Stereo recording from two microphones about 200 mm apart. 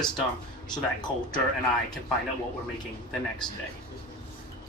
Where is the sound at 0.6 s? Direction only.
20° left (ahead or behind).